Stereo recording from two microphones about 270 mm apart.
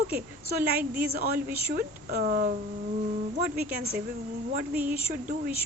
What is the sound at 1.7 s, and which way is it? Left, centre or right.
Speech, right.